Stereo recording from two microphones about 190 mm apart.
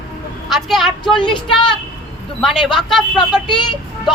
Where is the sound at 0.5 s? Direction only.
Centre (ahead or behind).